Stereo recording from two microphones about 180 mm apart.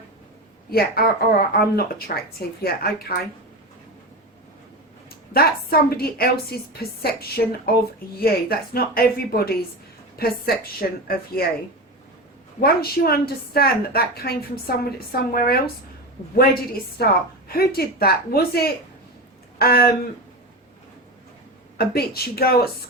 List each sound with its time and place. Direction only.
0.7 s a woman's voice: 60° left (ahead or behind)
5.9 s a woman's voice: 60° left (ahead or behind)
12.5 s a woman's voice: 55° left (ahead or behind)
21.8 s a woman's voice: 60° left (ahead or behind)